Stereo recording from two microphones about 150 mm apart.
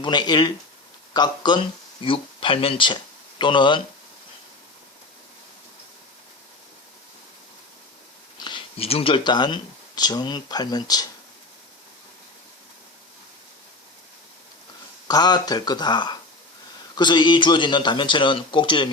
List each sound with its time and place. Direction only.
0.0 s speech: 30° left (ahead or behind)
8.4 s speech: 30° left (ahead or behind)
15.0 s speech: 30° left (ahead or behind)